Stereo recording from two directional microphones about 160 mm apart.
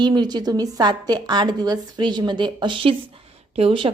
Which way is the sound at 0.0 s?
25° right (ahead or behind).